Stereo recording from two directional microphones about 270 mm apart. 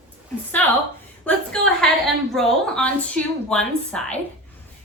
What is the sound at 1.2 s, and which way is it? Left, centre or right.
A woman's voice, centre.